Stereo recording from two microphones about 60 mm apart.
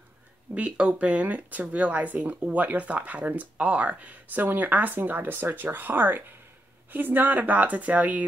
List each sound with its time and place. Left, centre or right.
0.6 s speech: right